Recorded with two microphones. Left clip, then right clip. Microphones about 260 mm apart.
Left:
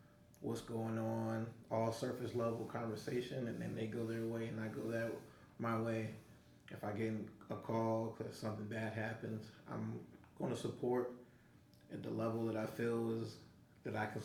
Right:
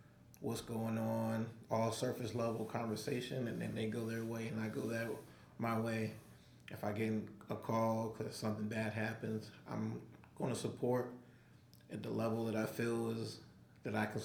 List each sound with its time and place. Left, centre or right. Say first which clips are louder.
0.4 s speech: right 1 dB; right